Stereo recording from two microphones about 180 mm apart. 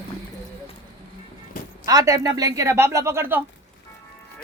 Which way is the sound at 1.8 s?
20° right (ahead or behind).